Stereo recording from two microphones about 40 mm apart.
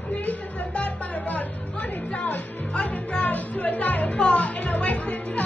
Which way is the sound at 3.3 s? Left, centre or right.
Left.